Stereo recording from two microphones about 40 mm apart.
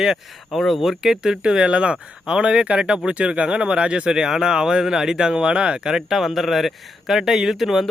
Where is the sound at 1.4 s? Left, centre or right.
Right.